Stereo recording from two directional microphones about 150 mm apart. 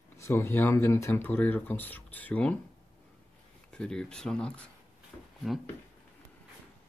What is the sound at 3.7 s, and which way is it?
Speech, 5° left (ahead or behind).